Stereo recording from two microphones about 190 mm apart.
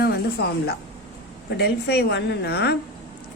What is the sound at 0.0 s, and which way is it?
A woman's voice, 60° left (ahead or behind).